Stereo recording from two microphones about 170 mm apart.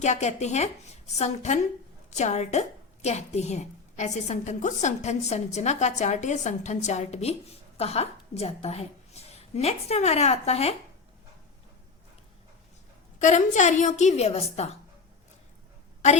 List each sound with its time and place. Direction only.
0.0 s a woman's voice: 40° left (ahead or behind)
13.2 s a woman's voice: 45° left (ahead or behind)